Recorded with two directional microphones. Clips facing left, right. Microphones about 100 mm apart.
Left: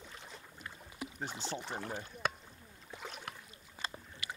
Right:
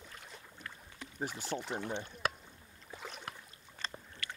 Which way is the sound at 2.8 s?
Centre (ahead or behind).